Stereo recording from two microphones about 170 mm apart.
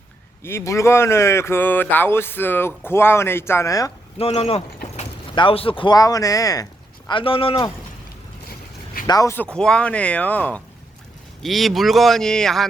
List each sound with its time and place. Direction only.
0.4 s speech: 15° left (ahead or behind)
4.2 s speech: 35° left (ahead or behind); by 6.7 s 20° left (ahead or behind)
7.1 s speech: 30° left (ahead or behind)
9.0 s speech: 20° left (ahead or behind)
9.6 s speech: 5° left (ahead or behind)